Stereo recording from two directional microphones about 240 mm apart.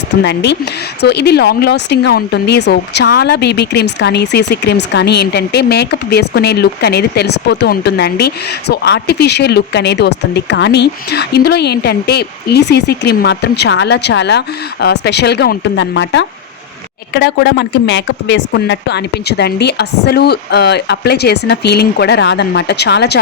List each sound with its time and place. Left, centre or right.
0.2 s speech: left